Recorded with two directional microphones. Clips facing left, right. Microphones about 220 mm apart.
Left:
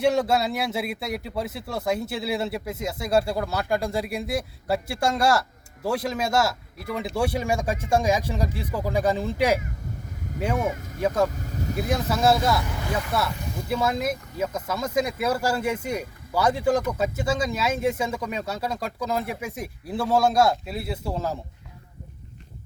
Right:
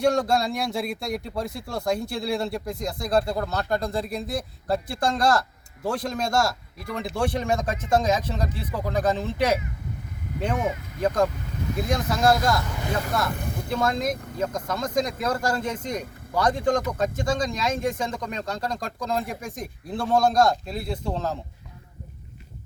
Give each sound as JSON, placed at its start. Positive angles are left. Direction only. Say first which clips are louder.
{"t": 0.0, "sound": "speech", "louder": "even", "side_deg": 5}
{"t": 11.3, "sound": "speech", "louder": "left 1 dB", "side_deg": 40}
{"t": 11.8, "sound": "speech", "louder": "even", "side_deg": 5}
{"t": 13.7, "sound": "speech", "louder": "even", "side_deg": 5}